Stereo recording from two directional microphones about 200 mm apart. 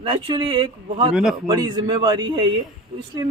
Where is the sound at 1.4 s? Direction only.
20° right (ahead or behind).